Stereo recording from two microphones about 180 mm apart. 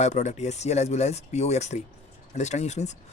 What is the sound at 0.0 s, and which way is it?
Speech, 40° left (ahead or behind).